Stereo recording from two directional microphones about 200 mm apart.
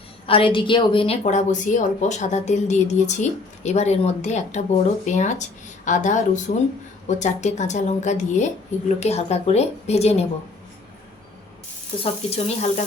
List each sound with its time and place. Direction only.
0.3 s a woman's voice: 25° left (ahead or behind)
12.3 s a woman's voice: 30° left (ahead or behind)